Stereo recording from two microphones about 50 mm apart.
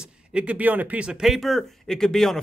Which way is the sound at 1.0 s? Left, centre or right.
Centre.